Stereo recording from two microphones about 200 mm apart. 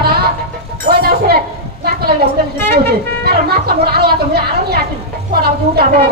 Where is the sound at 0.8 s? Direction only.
50° right (ahead or behind).